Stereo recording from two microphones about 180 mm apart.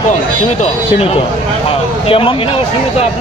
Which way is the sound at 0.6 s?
35° left (ahead or behind).